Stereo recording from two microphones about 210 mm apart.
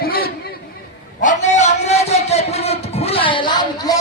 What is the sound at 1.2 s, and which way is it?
A man's voice, 35° left (ahead or behind).